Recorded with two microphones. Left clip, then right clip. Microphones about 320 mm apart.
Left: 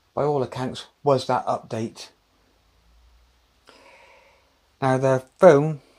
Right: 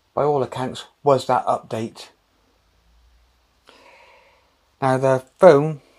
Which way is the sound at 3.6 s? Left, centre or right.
Centre.